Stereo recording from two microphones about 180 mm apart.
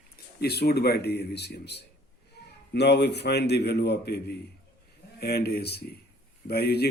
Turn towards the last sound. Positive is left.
turn(degrees=60)  # may be behind; listen again after turning